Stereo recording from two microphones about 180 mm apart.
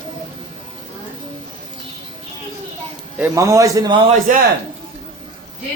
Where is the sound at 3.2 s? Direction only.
20° right (ahead or behind).